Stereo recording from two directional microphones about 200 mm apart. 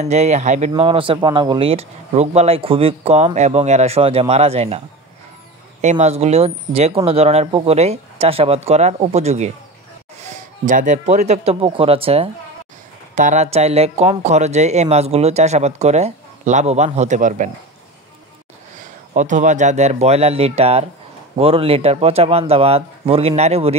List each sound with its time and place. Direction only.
0.0 s speech: 35° right (ahead or behind)
10.6 s speech: 40° right (ahead or behind)
19.1 s speech: 40° right (ahead or behind)